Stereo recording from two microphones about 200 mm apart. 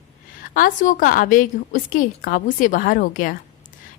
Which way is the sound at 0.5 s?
40° left (ahead or behind).